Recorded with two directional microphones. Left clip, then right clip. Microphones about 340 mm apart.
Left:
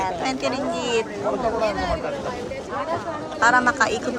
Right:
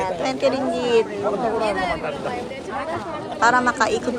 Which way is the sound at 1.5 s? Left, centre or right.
Right.